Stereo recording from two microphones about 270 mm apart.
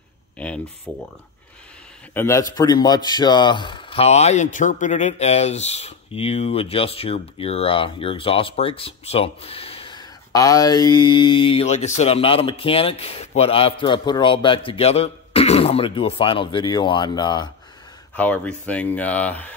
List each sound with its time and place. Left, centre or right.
0.9 s speech: centre
2.1 s a man's voice: centre